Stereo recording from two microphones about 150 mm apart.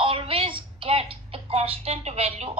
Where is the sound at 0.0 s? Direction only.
35° right (ahead or behind).